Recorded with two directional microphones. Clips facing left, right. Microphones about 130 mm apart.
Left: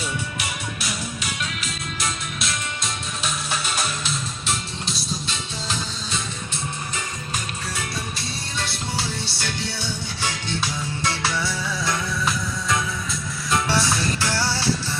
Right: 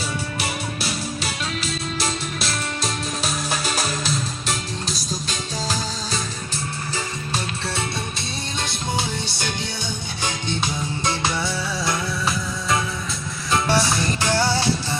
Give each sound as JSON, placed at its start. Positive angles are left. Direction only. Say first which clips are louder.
{"t": 0.0, "sound": "music", "louder": "right 2 dB", "side_deg": -35}
{"t": 8.5, "sound": "music", "louder": "right 3 dB", "side_deg": -20}
{"t": 13.7, "sound": "music", "louder": "right 2 dB", "side_deg": -20}